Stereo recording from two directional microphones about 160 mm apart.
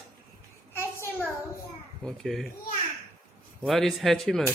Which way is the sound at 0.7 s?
15° left (ahead or behind).